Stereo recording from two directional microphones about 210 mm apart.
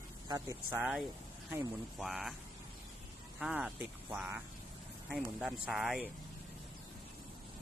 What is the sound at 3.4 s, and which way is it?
Speech, 5° right (ahead or behind).